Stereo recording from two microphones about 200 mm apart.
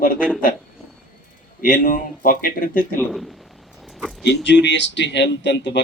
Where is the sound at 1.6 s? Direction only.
45° left (ahead or behind).